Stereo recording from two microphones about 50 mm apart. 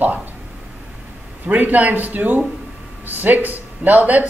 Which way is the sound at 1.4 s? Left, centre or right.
Right.